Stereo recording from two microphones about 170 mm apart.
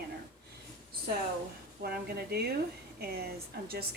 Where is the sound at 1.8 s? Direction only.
65° right (ahead or behind).